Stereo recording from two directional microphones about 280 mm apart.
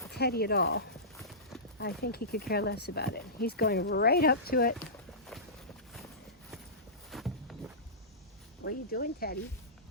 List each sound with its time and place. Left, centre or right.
0.1 s speech: left
7.1 s a sound: centre
8.6 s speech: left